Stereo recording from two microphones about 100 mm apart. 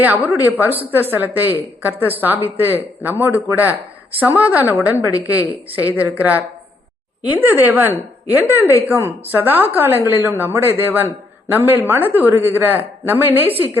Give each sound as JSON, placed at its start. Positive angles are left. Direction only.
{"t": 0.0, "sound": "a woman's voice", "side_deg": -15}